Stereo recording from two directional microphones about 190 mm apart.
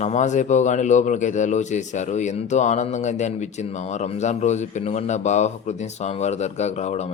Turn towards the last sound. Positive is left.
turn(degrees=35)  # may be behind; listen again after turning